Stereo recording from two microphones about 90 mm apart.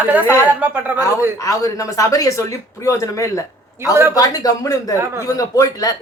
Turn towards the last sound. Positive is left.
turn(degrees=40)  # may be behind; listen again after turning